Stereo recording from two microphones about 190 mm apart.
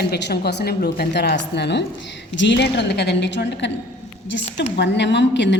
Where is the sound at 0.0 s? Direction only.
60° left (ahead or behind).